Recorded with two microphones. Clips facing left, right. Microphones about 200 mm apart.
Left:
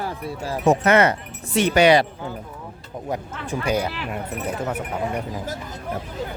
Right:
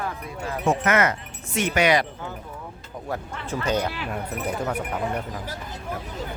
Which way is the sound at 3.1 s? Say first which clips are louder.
Left 2 dB; 10° left (ahead or behind).